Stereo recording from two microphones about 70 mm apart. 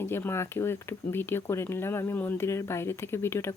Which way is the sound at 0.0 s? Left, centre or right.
Left.